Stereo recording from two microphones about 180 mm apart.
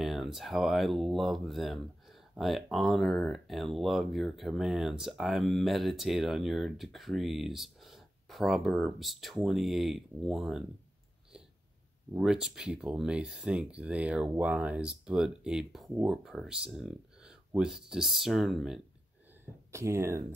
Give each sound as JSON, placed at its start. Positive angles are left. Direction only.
{"t": 0.0, "sound": "speech", "side_deg": 0}
{"t": 12.1, "sound": "speech", "side_deg": -5}
{"t": 19.7, "sound": "speech", "side_deg": -15}